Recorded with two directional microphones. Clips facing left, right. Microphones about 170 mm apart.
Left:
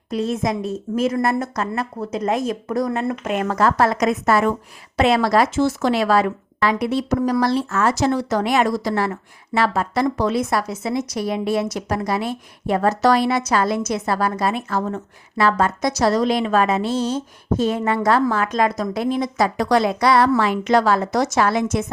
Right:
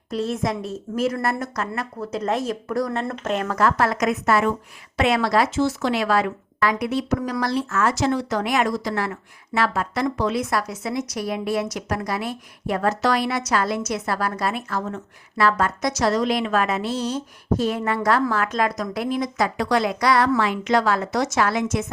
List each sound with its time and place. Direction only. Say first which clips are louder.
0.1 s speech: left 3 dB; 15° left (ahead or behind)
2.2 s speech: left 3 dB; 15° left (ahead or behind)
3.0 s speech: left 3 dB; 10° left (ahead or behind)
3.4 s speech: left 4 dB; 25° left (ahead or behind)
19.5 s speech: left 4 dB; 40° left (ahead or behind)